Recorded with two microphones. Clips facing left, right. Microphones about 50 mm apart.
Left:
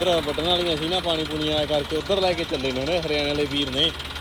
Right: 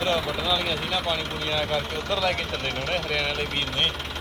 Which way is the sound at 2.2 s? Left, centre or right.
Right.